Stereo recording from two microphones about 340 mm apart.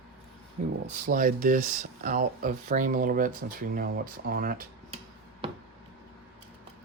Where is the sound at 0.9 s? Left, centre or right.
Right.